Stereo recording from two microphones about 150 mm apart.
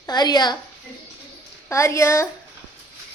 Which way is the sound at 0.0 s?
30° left (ahead or behind).